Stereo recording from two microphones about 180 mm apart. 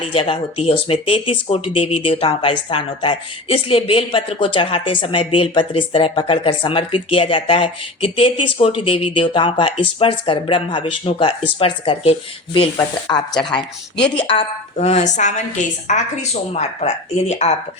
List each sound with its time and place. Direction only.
0.0 s a woman's voice: 30° left (ahead or behind)
13.3 s speech: 5° left (ahead or behind)
14.2 s a woman's voice: 30° left (ahead or behind)